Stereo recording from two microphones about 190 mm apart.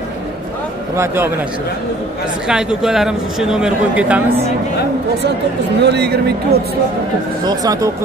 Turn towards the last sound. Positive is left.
turn(degrees=-20)  # may be behind; listen again after turning